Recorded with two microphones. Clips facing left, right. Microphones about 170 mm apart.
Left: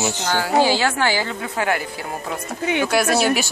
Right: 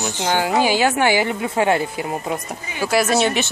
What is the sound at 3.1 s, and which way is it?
Speech, 5° left (ahead or behind).